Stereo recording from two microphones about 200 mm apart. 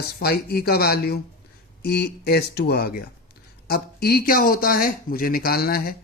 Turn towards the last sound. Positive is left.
turn(degrees=50)  # may be behind; listen again after turning